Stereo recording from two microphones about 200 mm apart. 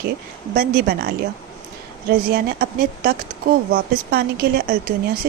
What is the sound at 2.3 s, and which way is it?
A woman's voice, 50° right (ahead or behind).